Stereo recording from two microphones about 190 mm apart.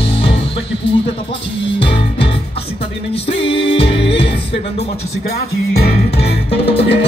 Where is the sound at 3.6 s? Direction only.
30° left (ahead or behind).